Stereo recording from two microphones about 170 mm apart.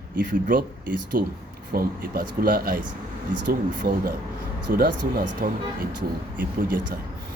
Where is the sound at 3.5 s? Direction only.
75° right (ahead or behind).